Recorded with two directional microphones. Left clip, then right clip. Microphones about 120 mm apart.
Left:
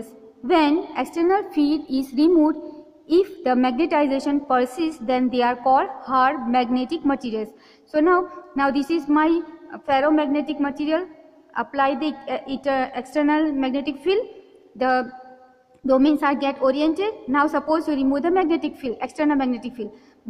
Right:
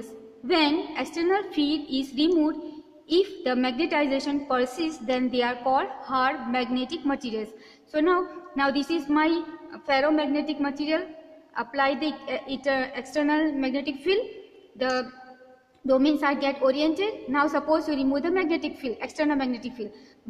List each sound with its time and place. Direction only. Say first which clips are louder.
0.5 s a woman's voice: left 5 dB; 35° left (ahead or behind)
7.2 s a woman's voice: left 4 dB; 20° left (ahead or behind)
7.9 s music: left 5 dB; 30° left (ahead or behind)
8.8 s a woman's voice: left 4 dB; 25° left (ahead or behind)